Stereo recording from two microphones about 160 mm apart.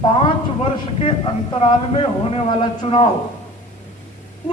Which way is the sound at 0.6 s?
35° left (ahead or behind).